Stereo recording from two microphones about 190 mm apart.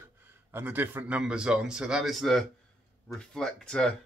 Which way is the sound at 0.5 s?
10° right (ahead or behind).